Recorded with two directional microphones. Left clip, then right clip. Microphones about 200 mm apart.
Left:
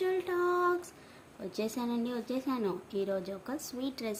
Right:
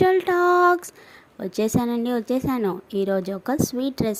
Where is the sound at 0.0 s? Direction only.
45° right (ahead or behind).